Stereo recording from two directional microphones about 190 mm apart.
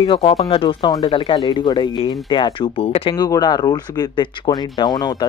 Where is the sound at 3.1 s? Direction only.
20° left (ahead or behind).